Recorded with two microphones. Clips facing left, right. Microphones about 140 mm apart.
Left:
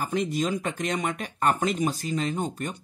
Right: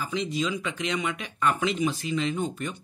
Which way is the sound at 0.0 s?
50° left (ahead or behind).